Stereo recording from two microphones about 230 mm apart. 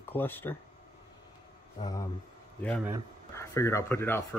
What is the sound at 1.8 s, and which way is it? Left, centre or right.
Speech, centre.